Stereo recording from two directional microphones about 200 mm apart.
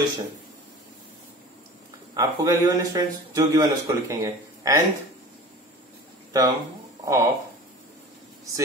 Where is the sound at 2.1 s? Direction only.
15° right (ahead or behind).